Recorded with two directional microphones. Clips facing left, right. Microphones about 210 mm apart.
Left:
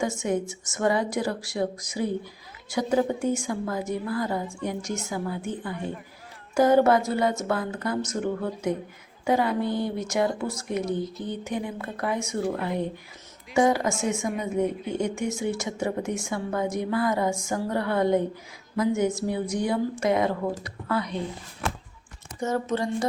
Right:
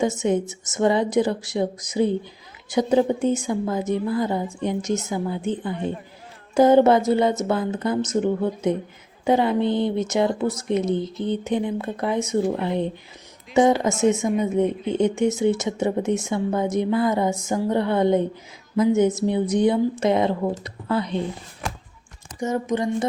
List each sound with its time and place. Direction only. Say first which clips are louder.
0.0 s a woman's voice: right 5 dB; 20° right (ahead or behind)
22.4 s a woman's voice: right 3 dB; 15° right (ahead or behind)